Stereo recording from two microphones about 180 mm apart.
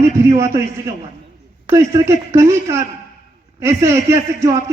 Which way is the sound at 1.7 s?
15° right (ahead or behind).